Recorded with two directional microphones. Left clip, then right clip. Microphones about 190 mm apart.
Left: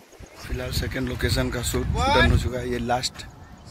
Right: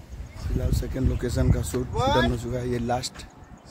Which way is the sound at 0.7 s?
10° right (ahead or behind).